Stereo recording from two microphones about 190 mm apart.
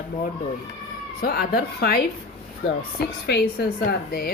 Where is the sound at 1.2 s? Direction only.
55° left (ahead or behind).